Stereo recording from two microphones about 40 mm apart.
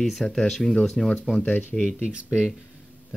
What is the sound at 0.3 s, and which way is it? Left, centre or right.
Speech, centre.